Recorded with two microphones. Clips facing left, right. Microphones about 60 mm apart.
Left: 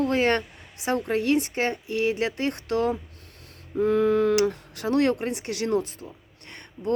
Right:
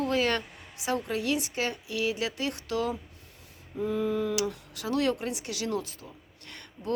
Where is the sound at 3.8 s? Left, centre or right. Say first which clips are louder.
Left 8 dB; left.